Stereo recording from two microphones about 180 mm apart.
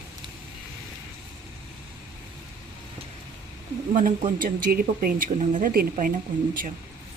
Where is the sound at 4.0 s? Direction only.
45° right (ahead or behind).